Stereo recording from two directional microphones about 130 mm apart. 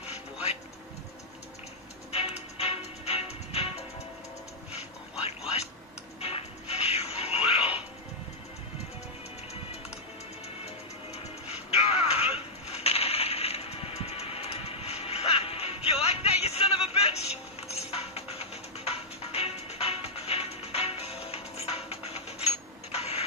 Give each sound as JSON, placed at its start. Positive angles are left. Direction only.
{"t": 0.0, "sound": "music", "side_deg": 55}
{"t": 2.1, "sound": "music", "side_deg": 50}
{"t": 6.2, "sound": "music", "side_deg": 50}
{"t": 11.4, "sound": "music", "side_deg": 55}
{"t": 12.7, "sound": "coin", "side_deg": 50}